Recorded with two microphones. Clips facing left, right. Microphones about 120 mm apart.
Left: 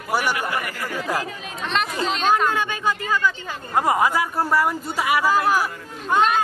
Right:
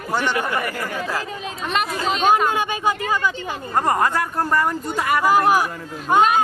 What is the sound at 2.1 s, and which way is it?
Speech, 10° right (ahead or behind).